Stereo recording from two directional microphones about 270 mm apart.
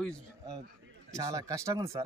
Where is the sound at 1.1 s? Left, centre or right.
Centre.